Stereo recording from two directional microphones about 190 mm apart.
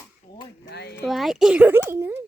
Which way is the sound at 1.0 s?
Centre (ahead or behind).